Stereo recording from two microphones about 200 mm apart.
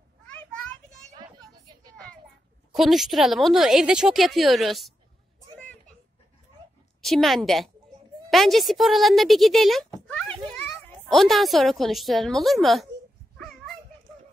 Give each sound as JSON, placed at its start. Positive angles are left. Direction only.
{"t": 2.7, "sound": "a woman's voice", "side_deg": 0}
{"t": 7.0, "sound": "a woman's voice", "side_deg": 0}
{"t": 10.0, "sound": "a sound", "side_deg": 5}
{"t": 11.1, "sound": "a woman's voice", "side_deg": 0}